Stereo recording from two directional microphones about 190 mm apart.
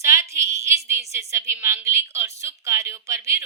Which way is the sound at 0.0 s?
15° right (ahead or behind).